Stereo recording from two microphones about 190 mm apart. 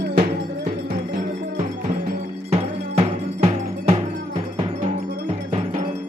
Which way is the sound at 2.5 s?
30° right (ahead or behind).